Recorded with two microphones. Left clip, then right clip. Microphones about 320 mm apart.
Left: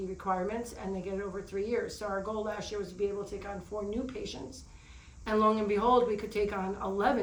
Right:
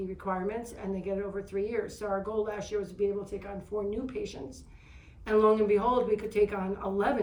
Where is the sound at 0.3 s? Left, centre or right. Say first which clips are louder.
Left 1 dB; centre.